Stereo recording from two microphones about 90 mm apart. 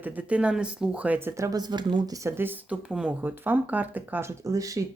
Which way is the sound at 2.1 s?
30° right (ahead or behind).